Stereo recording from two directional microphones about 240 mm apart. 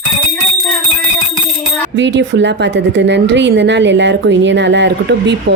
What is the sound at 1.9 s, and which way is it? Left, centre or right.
A woman's voice, right.